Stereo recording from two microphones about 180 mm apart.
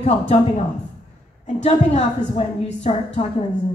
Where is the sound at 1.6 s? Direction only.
40° left (ahead or behind).